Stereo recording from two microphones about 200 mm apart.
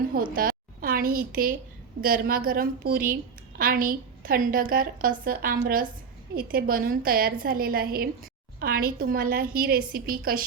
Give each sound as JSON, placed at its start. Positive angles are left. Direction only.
{"t": 0.1, "sound": "a woman's voice", "side_deg": -45}